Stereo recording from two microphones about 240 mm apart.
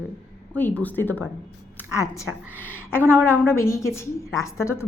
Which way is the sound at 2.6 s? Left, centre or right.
Centre.